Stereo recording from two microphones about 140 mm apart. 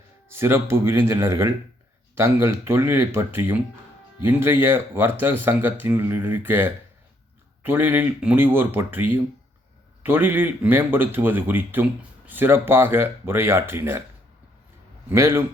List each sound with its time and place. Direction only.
0.3 s a man's voice: 15° right (ahead or behind)
15.1 s a man's voice: 20° right (ahead or behind)